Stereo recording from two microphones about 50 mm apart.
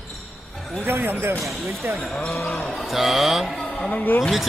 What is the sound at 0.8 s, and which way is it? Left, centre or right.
Speech, right.